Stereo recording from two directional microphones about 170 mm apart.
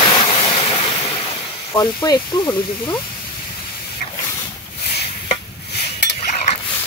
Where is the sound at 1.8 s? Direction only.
25° left (ahead or behind).